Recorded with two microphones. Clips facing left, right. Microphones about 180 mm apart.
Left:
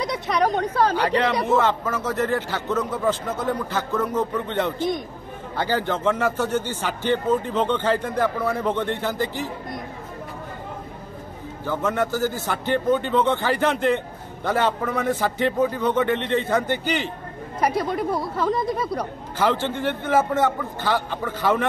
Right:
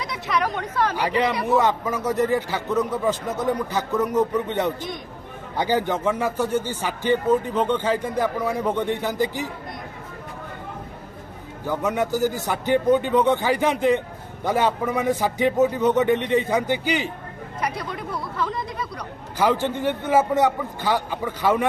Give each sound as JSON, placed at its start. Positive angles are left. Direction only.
{"t": 0.3, "sound": "speech", "side_deg": 35}
{"t": 0.9, "sound": "a man's voice", "side_deg": -10}
{"t": 5.6, "sound": "a man's voice", "side_deg": -15}
{"t": 11.6, "sound": "a man's voice", "side_deg": -15}
{"t": 17.6, "sound": "speech", "side_deg": 45}
{"t": 19.3, "sound": "a man's voice", "side_deg": -15}